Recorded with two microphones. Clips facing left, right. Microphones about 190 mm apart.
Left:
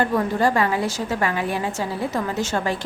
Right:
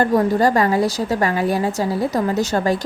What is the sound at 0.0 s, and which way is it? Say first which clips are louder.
A woman's voice: right 4 dB; 40° right (ahead or behind).